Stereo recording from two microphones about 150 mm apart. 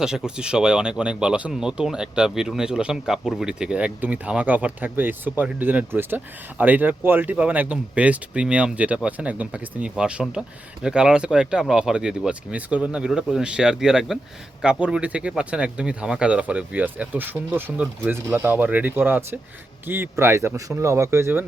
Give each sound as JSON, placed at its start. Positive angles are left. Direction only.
{"t": 0.0, "sound": "speech", "side_deg": -5}